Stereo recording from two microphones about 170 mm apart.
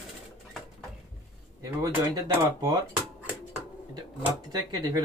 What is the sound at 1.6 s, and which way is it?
Speech, 20° right (ahead or behind).